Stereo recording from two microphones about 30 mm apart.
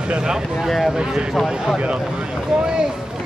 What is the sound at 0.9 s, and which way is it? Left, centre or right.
Speech, right.